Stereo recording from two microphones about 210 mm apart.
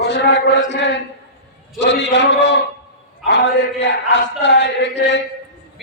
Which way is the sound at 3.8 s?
60° left (ahead or behind).